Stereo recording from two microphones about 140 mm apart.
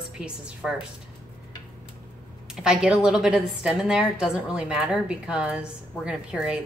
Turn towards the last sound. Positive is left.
turn(degrees=-5)  # may be behind; listen again after turning